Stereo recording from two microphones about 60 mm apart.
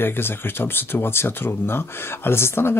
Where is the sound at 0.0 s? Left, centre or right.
Left.